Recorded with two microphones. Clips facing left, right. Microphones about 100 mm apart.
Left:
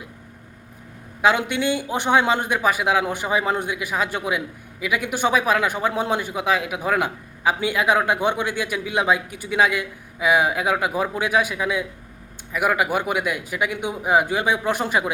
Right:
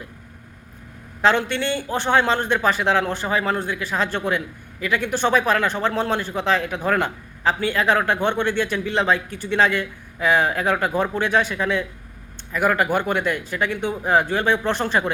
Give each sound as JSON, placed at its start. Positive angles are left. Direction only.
{"t": 1.2, "sound": "a man's voice", "side_deg": 10}